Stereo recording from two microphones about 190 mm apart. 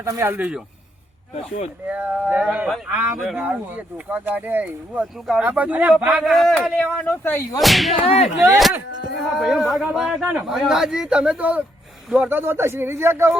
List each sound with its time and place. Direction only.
0.0 s speech: 15° right (ahead or behind)
1.9 s speech: 5° right (ahead or behind); by 7.6 s 10° left (ahead or behind)
7.6 s speech: centre (ahead or behind)
8.0 s whip: 35° left (ahead or behind)
9.4 s speech: centre (ahead or behind)